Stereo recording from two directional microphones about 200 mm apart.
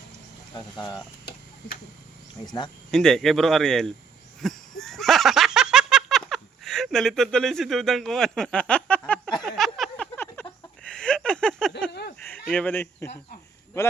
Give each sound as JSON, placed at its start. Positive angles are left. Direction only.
{"t": 0.5, "sound": "speech", "side_deg": 20}
{"t": 1.2, "sound": "a sound", "side_deg": 45}
{"t": 2.9, "sound": "speech", "side_deg": 5}
{"t": 4.8, "sound": "giggle", "side_deg": 0}
{"t": 9.4, "sound": "a sound", "side_deg": 0}
{"t": 12.2, "sound": "speech", "side_deg": 5}